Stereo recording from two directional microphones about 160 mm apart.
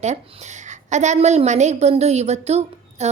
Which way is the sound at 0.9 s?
45° right (ahead or behind).